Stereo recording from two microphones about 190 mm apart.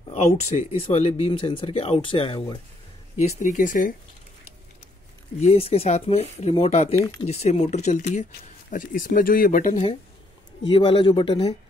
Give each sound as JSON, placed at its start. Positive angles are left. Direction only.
{"t": 0.1, "sound": "speech", "side_deg": 35}
{"t": 3.2, "sound": "speech", "side_deg": 40}
{"t": 5.4, "sound": "speech", "side_deg": 35}
{"t": 7.0, "sound": "speech", "side_deg": 20}
{"t": 7.2, "sound": "speech", "side_deg": 35}
{"t": 10.7, "sound": "speech", "side_deg": 30}